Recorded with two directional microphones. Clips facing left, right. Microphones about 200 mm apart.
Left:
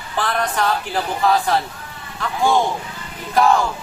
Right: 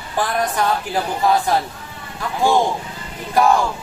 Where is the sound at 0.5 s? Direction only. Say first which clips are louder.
Right 1 dB; 15° right (ahead or behind).